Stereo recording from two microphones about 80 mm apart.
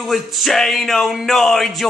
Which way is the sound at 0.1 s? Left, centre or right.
Centre.